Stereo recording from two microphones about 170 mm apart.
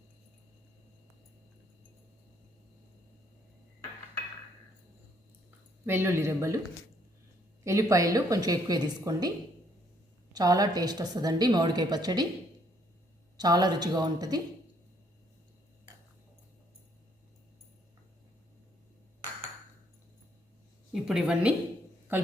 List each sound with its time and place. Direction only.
5.8 s speech: 15° right (ahead or behind)
7.6 s speech: 20° right (ahead or behind)
10.3 s speech: 20° right (ahead or behind)
13.3 s speech: 25° right (ahead or behind)
20.9 s a woman's voice: centre (ahead or behind)